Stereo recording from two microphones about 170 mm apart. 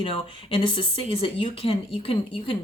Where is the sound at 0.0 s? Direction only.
30° left (ahead or behind).